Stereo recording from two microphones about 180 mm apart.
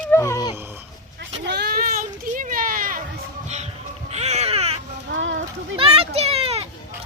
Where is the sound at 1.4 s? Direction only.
70° right (ahead or behind).